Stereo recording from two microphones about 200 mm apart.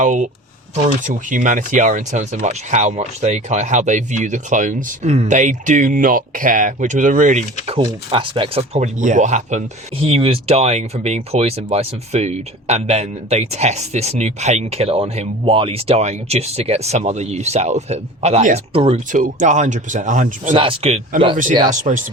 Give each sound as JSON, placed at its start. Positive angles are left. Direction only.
{"t": 0.0, "sound": "speech", "side_deg": -40}
{"t": 7.7, "sound": "speech", "side_deg": -25}
{"t": 19.2, "sound": "speech", "side_deg": -40}
{"t": 20.6, "sound": "speech", "side_deg": -30}